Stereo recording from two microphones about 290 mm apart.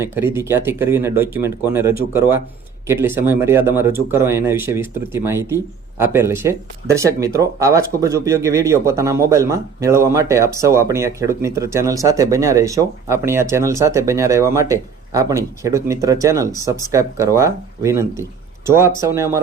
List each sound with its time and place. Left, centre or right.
0.0 s speech: centre